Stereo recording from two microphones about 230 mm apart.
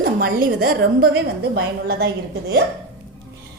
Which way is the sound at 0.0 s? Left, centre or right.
Right.